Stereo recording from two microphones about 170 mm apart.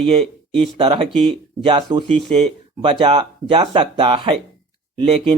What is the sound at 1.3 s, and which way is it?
Speech, 25° right (ahead or behind).